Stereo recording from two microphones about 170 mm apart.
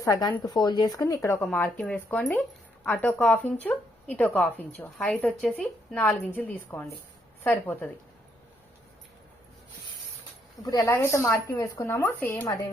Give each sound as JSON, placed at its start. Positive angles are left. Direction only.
{"t": 0.0, "sound": "a woman's voice", "side_deg": 20}
{"t": 10.7, "sound": "a woman's voice", "side_deg": 25}